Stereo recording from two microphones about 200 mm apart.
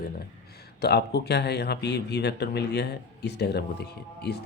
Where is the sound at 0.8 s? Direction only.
55° left (ahead or behind).